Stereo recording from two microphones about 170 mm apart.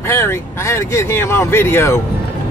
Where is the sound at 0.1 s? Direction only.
15° left (ahead or behind).